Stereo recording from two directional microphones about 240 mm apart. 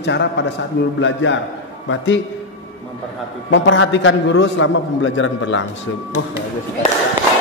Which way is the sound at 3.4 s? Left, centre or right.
Left.